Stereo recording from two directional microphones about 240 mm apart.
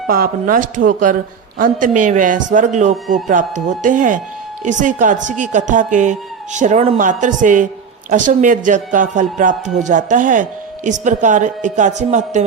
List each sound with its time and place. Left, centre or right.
0.1 s speech: right